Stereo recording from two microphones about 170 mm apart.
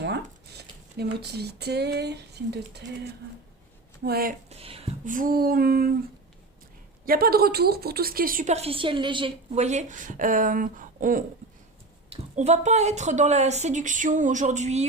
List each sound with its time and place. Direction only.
0.0 s speech: 75° right (ahead or behind)
4.0 s a woman's voice: 65° right (ahead or behind)
4.4 s speech: 35° right (ahead or behind)
5.0 s a woman's voice: 50° right (ahead or behind)
7.0 s a woman's voice: 60° right (ahead or behind)
8.5 s a woman's voice: 35° right (ahead or behind)
9.6 s a woman's voice: 45° right (ahead or behind)
12.1 s a woman's voice: 40° right (ahead or behind)